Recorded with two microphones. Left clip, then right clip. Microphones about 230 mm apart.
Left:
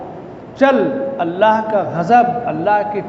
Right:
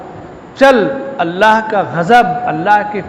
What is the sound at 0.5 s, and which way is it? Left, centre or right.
A man's voice, right.